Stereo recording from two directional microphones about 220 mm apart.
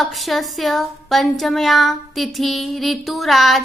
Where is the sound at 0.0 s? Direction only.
Centre (ahead or behind).